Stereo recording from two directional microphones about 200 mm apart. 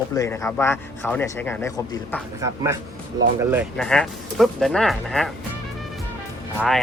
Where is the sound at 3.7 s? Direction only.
5° left (ahead or behind).